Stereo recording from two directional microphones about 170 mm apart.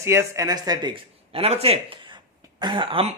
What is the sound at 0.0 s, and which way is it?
Speech, 15° right (ahead or behind).